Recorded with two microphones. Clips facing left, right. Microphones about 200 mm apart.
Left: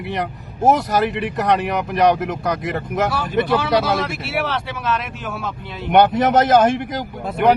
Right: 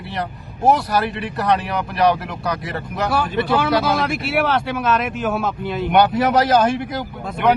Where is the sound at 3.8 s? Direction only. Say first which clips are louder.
Right 1 dB; 55° right (ahead or behind).